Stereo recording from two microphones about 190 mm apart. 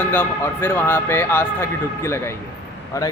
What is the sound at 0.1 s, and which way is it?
Speech, 10° left (ahead or behind).